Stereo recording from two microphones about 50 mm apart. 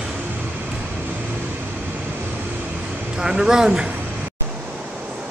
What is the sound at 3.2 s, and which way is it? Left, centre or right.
Speech, centre.